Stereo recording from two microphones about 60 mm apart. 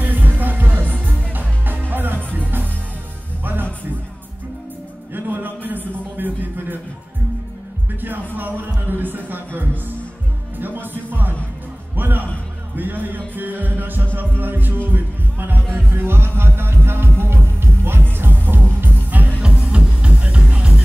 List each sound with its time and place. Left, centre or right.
0.0 s music: right
5.1 s music: right
6.1 s a sound: right
8.4 s music: right
14.1 s heart sounds: right
14.9 s music: right; by 20.8 s centre